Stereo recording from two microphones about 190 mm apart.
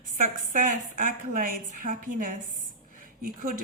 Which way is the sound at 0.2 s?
45° right (ahead or behind).